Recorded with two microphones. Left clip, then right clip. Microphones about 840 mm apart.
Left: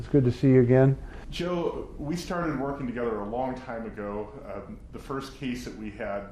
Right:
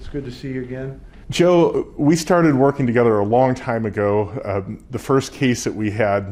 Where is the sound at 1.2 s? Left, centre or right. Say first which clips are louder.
Right 15 dB; right.